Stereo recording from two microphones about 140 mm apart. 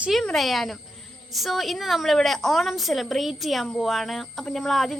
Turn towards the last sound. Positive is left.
turn(degrees=0)  # may be behind; listen again after turning